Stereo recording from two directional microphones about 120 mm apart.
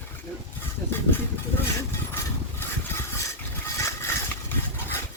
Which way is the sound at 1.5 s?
20° left (ahead or behind).